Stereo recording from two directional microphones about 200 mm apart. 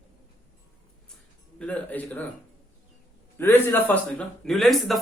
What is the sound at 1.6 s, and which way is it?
Speech, 5° left (ahead or behind).